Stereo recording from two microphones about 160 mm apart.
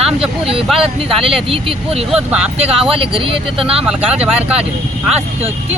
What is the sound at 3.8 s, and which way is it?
Speech, 5° right (ahead or behind).